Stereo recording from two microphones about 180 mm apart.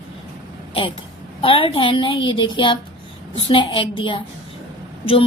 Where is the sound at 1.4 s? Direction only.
30° left (ahead or behind).